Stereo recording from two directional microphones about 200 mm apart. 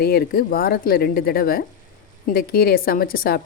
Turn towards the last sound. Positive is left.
turn(degrees=45)  # may be behind; listen again after turning